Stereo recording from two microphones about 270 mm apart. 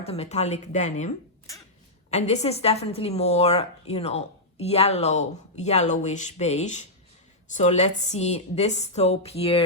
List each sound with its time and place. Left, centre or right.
0.0 s a woman's voice: left